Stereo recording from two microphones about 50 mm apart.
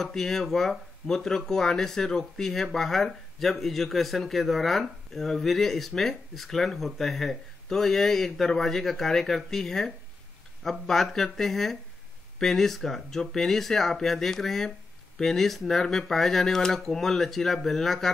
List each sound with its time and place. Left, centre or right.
0.0 s speech: centre